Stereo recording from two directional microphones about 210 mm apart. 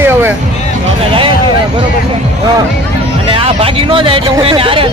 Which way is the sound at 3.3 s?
25° right (ahead or behind).